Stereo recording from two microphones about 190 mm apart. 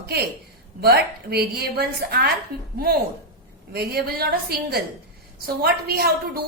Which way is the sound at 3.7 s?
55° right (ahead or behind).